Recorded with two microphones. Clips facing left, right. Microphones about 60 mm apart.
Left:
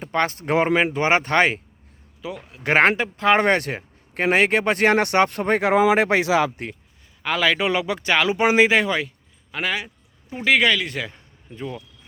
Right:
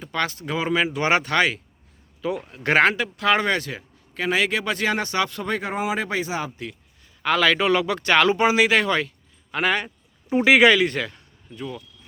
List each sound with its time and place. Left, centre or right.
0.0 s speech: left
0.9 s speech: left
2.2 s speech: centre
2.6 s speech: left
3.4 s speech: left
5.6 s speech: left
7.2 s speech: centre
8.4 s speech: left; by 11.1 s centre
11.1 s a sound: left